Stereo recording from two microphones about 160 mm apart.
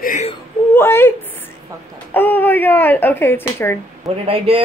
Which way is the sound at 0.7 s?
15° left (ahead or behind).